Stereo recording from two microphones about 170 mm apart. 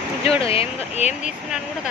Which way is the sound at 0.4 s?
35° left (ahead or behind).